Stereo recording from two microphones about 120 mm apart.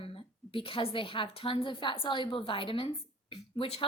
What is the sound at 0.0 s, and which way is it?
A woman's voice, 50° left (ahead or behind).